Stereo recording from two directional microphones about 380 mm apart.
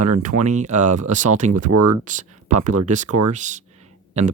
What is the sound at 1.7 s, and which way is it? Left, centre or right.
Speech, right.